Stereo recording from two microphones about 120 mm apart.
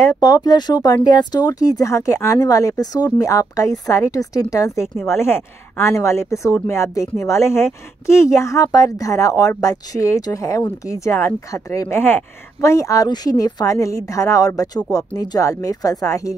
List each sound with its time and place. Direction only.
0.0 s speech: 25° left (ahead or behind)